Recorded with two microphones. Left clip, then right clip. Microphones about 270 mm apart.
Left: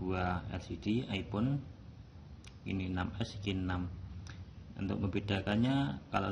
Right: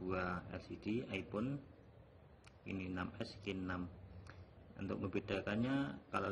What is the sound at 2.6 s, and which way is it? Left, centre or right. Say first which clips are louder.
Speech: left 6 dB; centre.